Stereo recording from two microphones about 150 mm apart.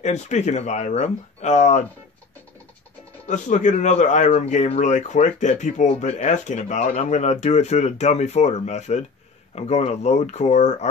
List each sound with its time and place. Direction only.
0.0 s speech: 50° left (ahead or behind)
3.3 s speech: 55° left (ahead or behind)